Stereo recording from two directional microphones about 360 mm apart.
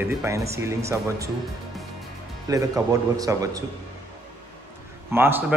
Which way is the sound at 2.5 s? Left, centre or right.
Centre.